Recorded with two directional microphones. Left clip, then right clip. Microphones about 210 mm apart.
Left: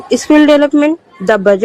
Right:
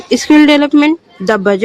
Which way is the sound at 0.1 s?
35° right (ahead or behind).